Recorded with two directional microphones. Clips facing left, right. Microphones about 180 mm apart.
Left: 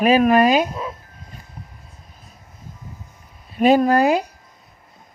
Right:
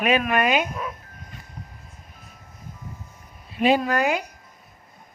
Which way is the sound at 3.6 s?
45° left (ahead or behind).